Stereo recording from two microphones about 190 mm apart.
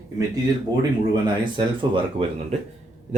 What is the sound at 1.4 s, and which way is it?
Speech, 25° right (ahead or behind).